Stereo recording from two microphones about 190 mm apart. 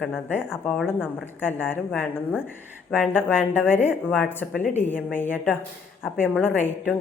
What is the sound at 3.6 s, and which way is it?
Speech, 10° left (ahead or behind).